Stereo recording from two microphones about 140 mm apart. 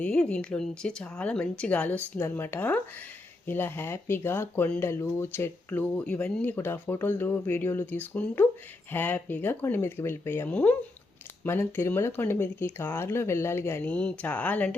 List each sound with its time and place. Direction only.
0.0 s speech: 5° left (ahead or behind)